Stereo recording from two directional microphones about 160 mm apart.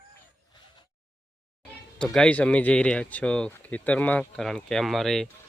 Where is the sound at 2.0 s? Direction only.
5° left (ahead or behind).